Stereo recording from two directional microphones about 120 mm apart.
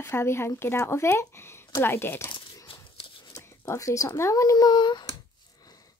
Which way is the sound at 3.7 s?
25° left (ahead or behind).